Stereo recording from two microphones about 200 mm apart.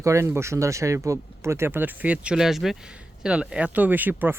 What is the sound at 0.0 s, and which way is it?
Speech, 15° right (ahead or behind).